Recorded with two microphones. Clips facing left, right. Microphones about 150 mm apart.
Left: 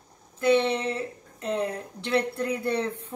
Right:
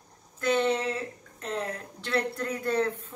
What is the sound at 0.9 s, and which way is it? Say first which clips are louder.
A woman's voice: left 2 dB; 15° left (ahead or behind).